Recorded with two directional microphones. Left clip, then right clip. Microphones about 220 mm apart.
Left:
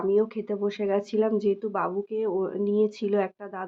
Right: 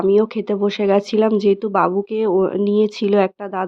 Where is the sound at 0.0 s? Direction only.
45° right (ahead or behind).